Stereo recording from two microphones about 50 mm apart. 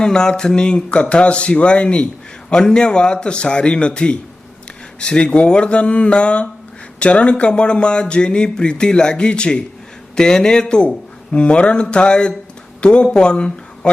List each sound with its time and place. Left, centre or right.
0.0 s speech: centre
1.1 s a sound: left
12.8 s speech: left